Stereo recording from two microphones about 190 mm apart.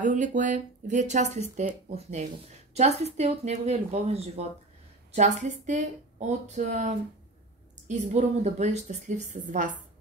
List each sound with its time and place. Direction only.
0.0 s speech: 40° right (ahead or behind)